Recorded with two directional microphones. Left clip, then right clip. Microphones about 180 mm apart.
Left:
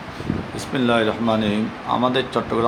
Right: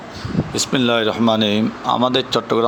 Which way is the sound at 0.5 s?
50° right (ahead or behind).